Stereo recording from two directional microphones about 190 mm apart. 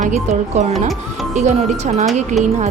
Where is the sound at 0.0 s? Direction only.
40° right (ahead or behind).